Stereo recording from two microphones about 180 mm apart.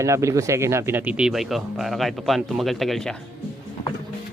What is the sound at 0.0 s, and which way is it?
Speech, 15° right (ahead or behind).